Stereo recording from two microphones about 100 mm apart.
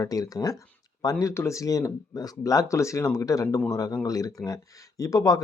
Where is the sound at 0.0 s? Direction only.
35° left (ahead or behind).